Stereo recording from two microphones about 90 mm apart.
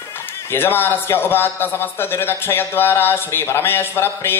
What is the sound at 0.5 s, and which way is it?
Speech, 25° left (ahead or behind).